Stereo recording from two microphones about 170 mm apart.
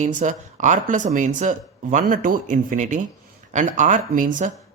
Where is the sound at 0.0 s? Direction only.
50° right (ahead or behind).